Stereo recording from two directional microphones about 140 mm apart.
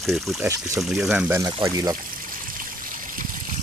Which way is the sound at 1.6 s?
25° right (ahead or behind).